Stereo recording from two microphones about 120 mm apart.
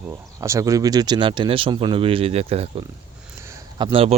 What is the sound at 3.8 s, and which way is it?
Speech, 50° right (ahead or behind).